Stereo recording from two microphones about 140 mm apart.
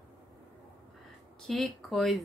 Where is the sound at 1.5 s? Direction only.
5° left (ahead or behind).